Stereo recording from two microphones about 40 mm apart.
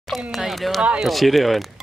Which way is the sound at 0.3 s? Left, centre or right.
Centre.